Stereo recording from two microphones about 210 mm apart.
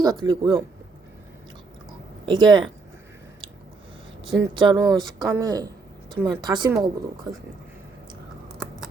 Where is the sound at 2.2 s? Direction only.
20° right (ahead or behind).